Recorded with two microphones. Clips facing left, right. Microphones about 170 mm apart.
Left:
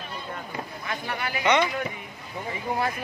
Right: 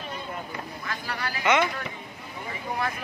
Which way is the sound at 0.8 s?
20° left (ahead or behind).